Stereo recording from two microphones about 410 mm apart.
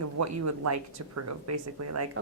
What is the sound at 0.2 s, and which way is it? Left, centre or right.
Speech, right.